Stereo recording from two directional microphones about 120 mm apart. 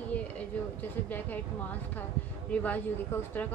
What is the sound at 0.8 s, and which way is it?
Speech, 15° left (ahead or behind).